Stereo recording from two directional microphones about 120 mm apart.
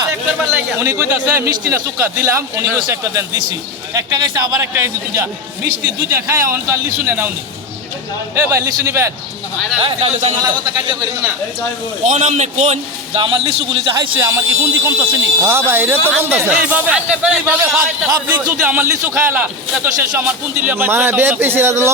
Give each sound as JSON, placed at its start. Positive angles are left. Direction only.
{"t": 0.5, "sound": "a man's voice", "side_deg": -20}
{"t": 4.6, "sound": "a man's voice", "side_deg": -20}
{"t": 8.4, "sound": "a man's voice", "side_deg": -20}
{"t": 9.8, "sound": "a man's voice", "side_deg": -50}
{"t": 12.0, "sound": "a man's voice", "side_deg": -70}
{"t": 13.1, "sound": "a man's voice", "side_deg": -45}
{"t": 14.2, "sound": "a man's voice", "side_deg": -25}